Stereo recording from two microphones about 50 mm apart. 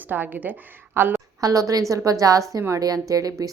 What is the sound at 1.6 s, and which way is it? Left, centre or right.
Speech, right.